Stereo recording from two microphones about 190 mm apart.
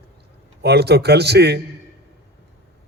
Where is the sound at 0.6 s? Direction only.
60° right (ahead or behind).